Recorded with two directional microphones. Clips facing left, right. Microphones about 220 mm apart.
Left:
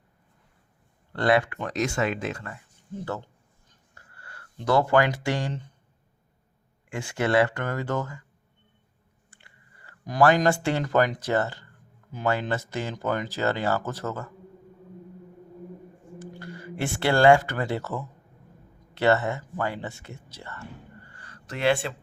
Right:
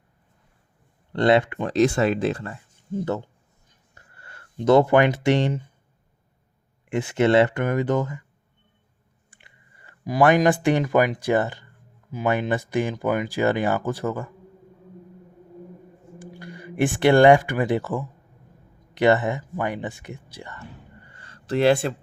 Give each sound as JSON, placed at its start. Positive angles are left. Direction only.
{"t": 1.1, "sound": "speech", "side_deg": -25}
{"t": 3.0, "sound": "speech", "side_deg": -20}
{"t": 3.9, "sound": "a sound", "side_deg": -20}
{"t": 6.9, "sound": "speech", "side_deg": -20}
{"t": 9.3, "sound": "clicking", "side_deg": -15}
{"t": 10.2, "sound": "speech", "side_deg": -15}
{"t": 16.1, "sound": "speech", "side_deg": -15}
{"t": 21.1, "sound": "a sound", "side_deg": -25}